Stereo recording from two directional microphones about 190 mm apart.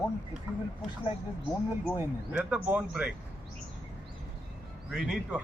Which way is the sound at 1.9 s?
10° right (ahead or behind).